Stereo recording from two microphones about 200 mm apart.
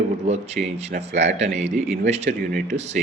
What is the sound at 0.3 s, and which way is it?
A man's voice, 35° right (ahead or behind).